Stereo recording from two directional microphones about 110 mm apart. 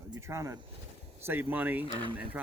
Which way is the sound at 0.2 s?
25° right (ahead or behind).